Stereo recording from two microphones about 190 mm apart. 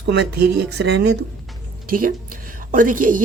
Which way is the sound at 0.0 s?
65° right (ahead or behind).